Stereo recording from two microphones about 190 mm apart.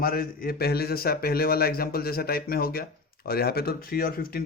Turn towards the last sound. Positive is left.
turn(degrees=50)  # may be behind; listen again after turning